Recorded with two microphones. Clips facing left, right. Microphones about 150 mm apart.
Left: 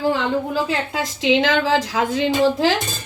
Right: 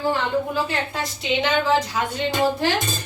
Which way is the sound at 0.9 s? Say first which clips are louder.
Left 10 dB; 90° left.